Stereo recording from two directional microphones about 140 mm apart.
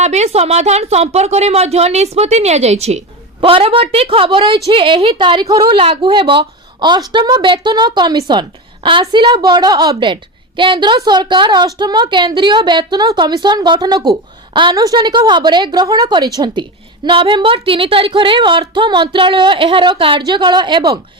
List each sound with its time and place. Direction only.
0.0 s a woman's voice: 55° right (ahead or behind)
3.4 s a woman's voice: 40° right (ahead or behind)